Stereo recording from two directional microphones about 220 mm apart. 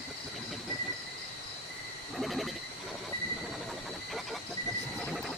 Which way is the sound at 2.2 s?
Centre (ahead or behind).